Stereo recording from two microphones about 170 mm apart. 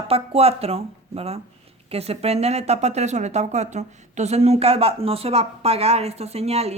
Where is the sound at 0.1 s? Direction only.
35° right (ahead or behind).